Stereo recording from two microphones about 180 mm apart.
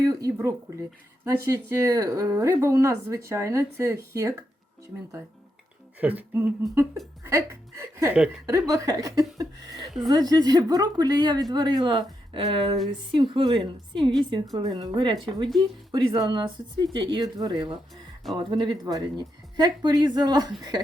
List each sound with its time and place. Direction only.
0.0 s speech: 20° right (ahead or behind)
6.0 s speech: 10° right (ahead or behind)